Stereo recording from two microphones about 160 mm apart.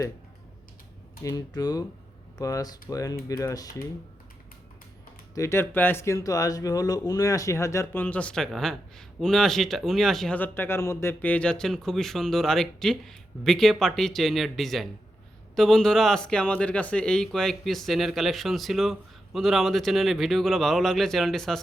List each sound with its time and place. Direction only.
1.2 s speech: 20° left (ahead or behind)
5.3 s speech: 15° left (ahead or behind); by 21.6 s centre (ahead or behind)